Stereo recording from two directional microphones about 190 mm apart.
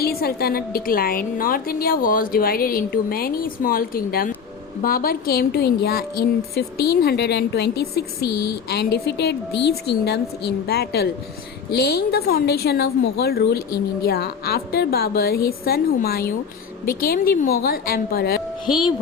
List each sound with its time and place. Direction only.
0.0 s a woman's voice: 55° left (ahead or behind)